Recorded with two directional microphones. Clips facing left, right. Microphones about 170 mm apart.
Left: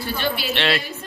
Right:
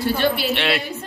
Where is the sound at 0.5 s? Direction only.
10° right (ahead or behind).